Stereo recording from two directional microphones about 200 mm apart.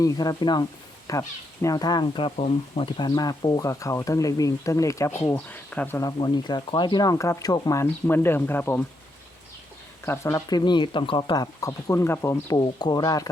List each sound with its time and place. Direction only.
0.0 s speech: 20° left (ahead or behind)
10.1 s speech: 15° left (ahead or behind)